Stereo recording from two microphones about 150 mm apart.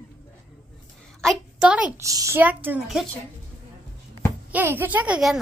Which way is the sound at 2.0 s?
20° right (ahead or behind).